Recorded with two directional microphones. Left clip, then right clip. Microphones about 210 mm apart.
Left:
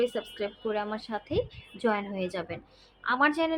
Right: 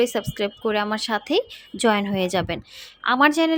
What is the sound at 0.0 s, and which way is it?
A woman's voice, 50° right (ahead or behind).